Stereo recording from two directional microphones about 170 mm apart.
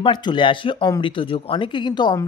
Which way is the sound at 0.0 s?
25° left (ahead or behind).